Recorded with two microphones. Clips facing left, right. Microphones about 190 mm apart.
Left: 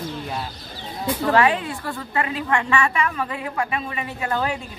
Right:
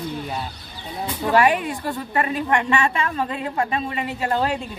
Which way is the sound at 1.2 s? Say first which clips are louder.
Right 1 dB; 15° right (ahead or behind).